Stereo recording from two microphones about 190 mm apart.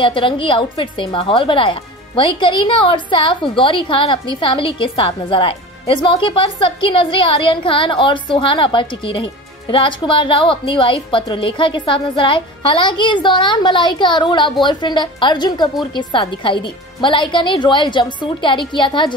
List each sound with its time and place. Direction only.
0.0 s a woman's voice: 25° left (ahead or behind)